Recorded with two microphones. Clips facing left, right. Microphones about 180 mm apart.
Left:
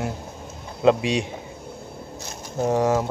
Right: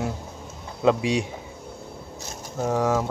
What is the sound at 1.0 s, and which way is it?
Speech, 70° left (ahead or behind).